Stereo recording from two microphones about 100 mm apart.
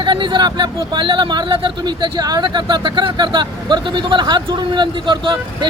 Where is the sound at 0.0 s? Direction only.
50° right (ahead or behind).